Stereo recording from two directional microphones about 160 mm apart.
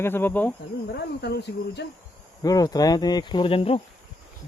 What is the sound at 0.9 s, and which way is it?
Speech, 90° left.